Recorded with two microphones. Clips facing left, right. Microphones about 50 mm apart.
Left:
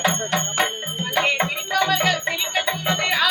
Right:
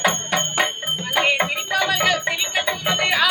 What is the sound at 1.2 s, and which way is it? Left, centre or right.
Music, centre.